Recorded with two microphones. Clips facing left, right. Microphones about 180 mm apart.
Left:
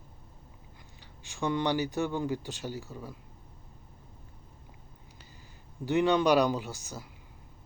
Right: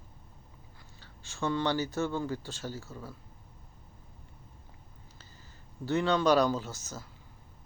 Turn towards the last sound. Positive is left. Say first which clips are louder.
# left 1 dB
turn(degrees=15)  # may be behind; listen again after turning